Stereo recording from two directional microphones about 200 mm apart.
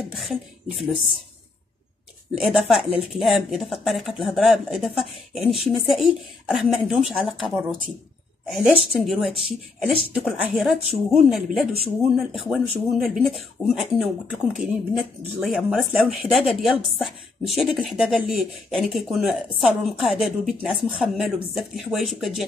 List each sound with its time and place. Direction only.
0.1 s speech: centre (ahead or behind)
2.4 s speech: centre (ahead or behind)